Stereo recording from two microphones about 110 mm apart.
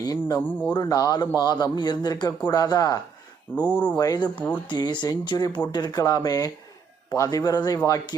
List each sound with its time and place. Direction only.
0.0 s speech: 35° left (ahead or behind)
3.5 s speech: 15° left (ahead or behind)
3.9 s speech: 35° left (ahead or behind)
4.4 s speech: 15° left (ahead or behind)
4.7 s speech: 40° left (ahead or behind)